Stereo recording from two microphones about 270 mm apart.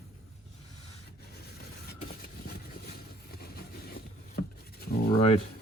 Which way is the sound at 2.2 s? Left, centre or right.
Left.